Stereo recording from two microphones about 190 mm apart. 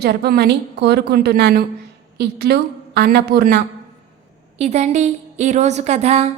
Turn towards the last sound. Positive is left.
turn(degrees=-35)  # may be behind; listen again after turning